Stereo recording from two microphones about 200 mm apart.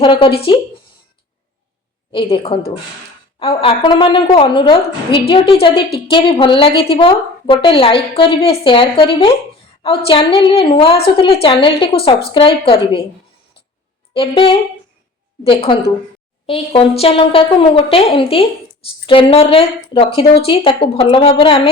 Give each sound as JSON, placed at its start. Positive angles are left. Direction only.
{"t": 0.0, "sound": "a woman's voice", "side_deg": 25}
{"t": 2.1, "sound": "a woman's voice", "side_deg": 25}
{"t": 14.1, "sound": "a woman's voice", "side_deg": 25}